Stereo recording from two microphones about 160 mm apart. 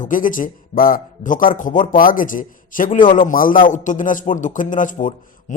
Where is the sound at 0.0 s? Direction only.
55° left (ahead or behind).